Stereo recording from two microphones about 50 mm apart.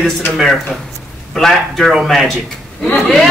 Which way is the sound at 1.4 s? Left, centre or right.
Centre.